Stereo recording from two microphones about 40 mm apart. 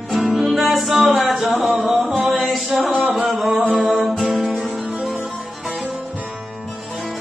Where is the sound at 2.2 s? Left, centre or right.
Centre.